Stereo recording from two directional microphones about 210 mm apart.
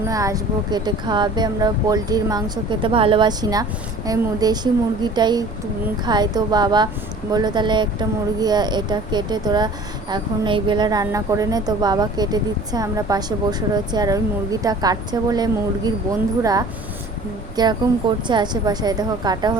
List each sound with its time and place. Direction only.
0.1 s a woman's voice: 15° right (ahead or behind)